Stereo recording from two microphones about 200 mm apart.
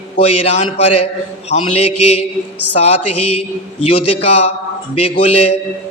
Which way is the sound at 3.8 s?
30° left (ahead or behind).